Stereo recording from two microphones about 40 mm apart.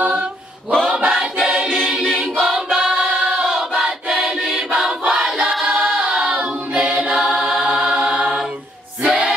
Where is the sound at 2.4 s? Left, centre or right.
Centre.